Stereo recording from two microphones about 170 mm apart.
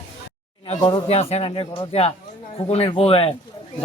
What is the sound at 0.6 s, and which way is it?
Speech, 30° left (ahead or behind).